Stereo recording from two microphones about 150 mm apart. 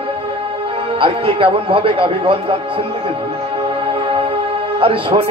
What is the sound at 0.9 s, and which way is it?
A man's voice, 35° right (ahead or behind).